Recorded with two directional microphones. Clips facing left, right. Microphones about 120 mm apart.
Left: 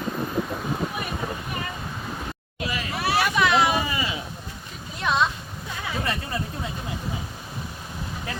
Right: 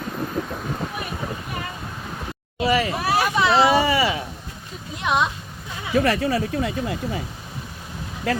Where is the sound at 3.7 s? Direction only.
80° right.